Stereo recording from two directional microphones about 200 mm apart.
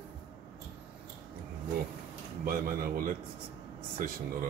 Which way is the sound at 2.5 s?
45° right (ahead or behind).